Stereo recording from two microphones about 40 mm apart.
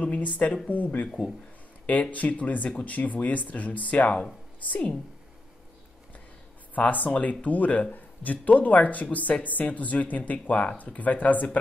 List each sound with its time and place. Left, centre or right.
0.0 s speech: left
6.7 s speech: left